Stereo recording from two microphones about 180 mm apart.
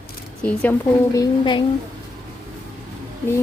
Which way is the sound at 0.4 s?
10° left (ahead or behind).